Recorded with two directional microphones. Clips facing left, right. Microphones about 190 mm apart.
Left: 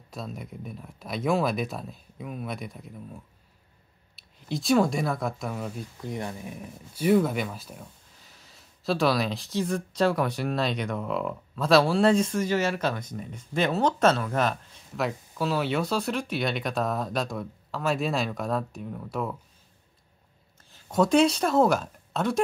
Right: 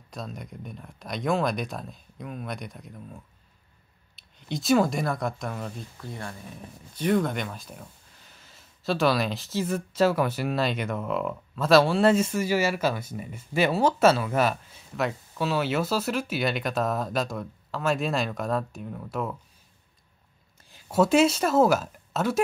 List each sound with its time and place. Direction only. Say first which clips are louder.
0.1 s speech: left 1 dB; centre (ahead or behind)
5.9 s speech: left 4 dB; 20° left (ahead or behind); by 19.3 s centre (ahead or behind)
20.7 s a woman's voice: right 1 dB; 5° right (ahead or behind)